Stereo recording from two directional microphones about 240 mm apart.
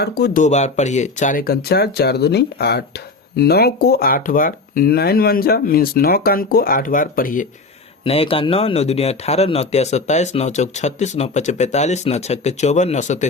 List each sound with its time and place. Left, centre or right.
0.0 s speech: left
8.0 s a man's voice: left